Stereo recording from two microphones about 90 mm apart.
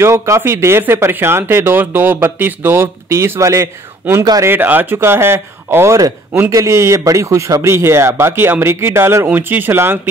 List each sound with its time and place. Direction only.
0.0 s speech: 30° right (ahead or behind)
4.5 s speech: 20° right (ahead or behind)